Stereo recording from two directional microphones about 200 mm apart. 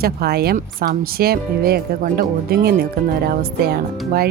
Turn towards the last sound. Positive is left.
turn(degrees=-50)  # may be behind; listen again after turning